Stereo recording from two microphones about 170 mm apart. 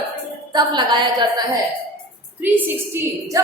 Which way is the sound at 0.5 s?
25° right (ahead or behind).